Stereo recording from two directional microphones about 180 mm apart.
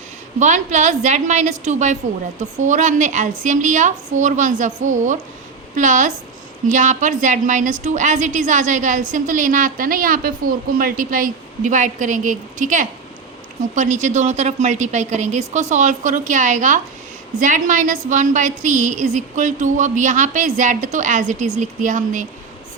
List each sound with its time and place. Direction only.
0.3 s a woman's voice: 40° right (ahead or behind)